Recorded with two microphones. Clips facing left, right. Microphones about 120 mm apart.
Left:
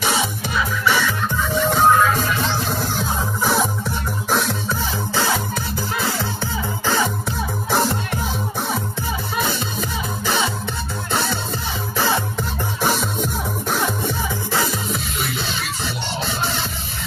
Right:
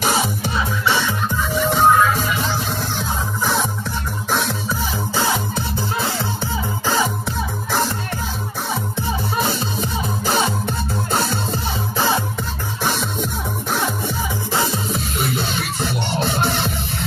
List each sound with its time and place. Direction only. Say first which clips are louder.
0.0 s music: right 2 dB; 45° right (ahead or behind)
0.6 s music: left 1 dB; 25° right (ahead or behind)
1.5 s music: right 1 dB; centre (ahead or behind)
5.9 s music: left 1 dB; 25° right (ahead or behind)
9.4 s music: right 2 dB; 40° right (ahead or behind)
12.8 s music: left 1 dB; centre (ahead or behind)
14.5 s music: right 2 dB; 25° right (ahead or behind)
15.1 s music: right 3 dB; 45° right (ahead or behind)